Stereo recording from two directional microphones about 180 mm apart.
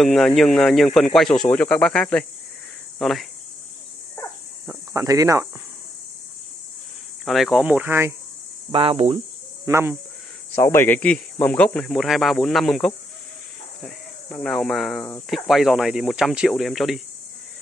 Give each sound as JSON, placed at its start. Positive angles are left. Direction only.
{"t": 0.0, "sound": "speech", "side_deg": 0}
{"t": 4.6, "sound": "cricket", "side_deg": -15}
{"t": 7.2, "sound": "speech", "side_deg": 0}
{"t": 8.7, "sound": "speech", "side_deg": -35}
{"t": 9.7, "sound": "speech", "side_deg": -15}
{"t": 10.5, "sound": "speech", "side_deg": 15}